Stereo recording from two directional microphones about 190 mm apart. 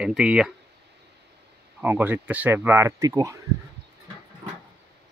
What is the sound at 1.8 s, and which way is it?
Speech, 10° right (ahead or behind).